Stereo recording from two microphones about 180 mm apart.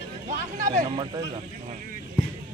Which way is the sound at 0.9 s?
25° right (ahead or behind).